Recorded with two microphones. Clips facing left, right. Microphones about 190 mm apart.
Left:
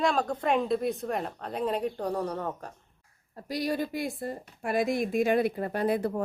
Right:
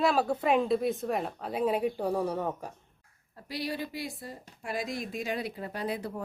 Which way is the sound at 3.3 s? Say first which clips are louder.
Left 5 dB; 45° left (ahead or behind).